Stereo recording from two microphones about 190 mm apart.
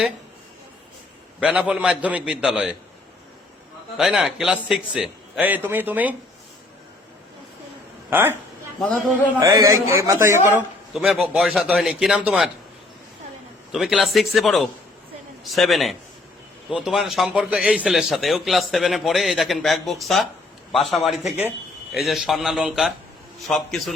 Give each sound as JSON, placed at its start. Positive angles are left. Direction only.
{"t": 1.4, "sound": "speech", "side_deg": -5}
{"t": 3.9, "sound": "speech", "side_deg": -5}
{"t": 8.1, "sound": "a man's voice", "side_deg": -10}
{"t": 8.8, "sound": "a man's voice", "side_deg": 5}
{"t": 9.4, "sound": "a man's voice", "side_deg": -15}
{"t": 10.9, "sound": "speech", "side_deg": 0}
{"t": 13.7, "sound": "speech", "side_deg": 0}